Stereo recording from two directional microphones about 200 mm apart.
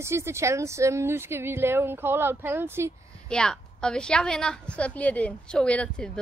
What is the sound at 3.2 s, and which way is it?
A woman's voice, 5° left (ahead or behind).